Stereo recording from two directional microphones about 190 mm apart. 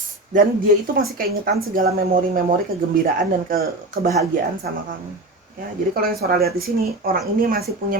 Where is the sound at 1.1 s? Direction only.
50° right (ahead or behind).